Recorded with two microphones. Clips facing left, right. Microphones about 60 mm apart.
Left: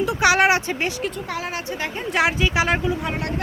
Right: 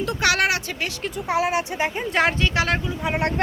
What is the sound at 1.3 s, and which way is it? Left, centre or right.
Speech, centre.